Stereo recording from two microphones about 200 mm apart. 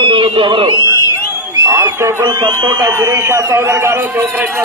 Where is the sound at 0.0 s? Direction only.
25° right (ahead or behind).